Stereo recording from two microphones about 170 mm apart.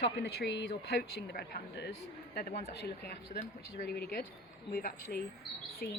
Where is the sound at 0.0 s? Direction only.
80° left.